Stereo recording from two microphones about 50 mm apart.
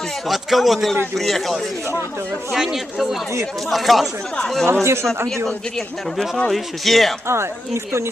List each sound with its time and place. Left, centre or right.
0.3 s a man's voice: centre
4.6 s speech: right
5.5 s a man's voice: centre
7.3 s speech: right